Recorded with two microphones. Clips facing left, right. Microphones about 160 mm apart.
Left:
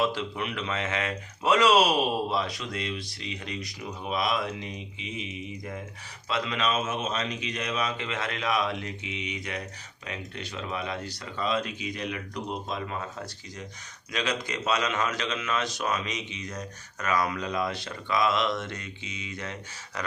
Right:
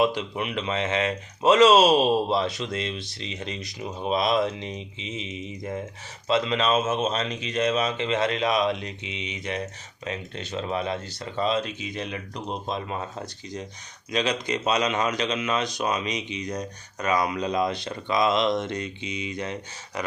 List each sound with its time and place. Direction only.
0.0 s speech: 20° right (ahead or behind)
14.1 s speech: 20° right (ahead or behind)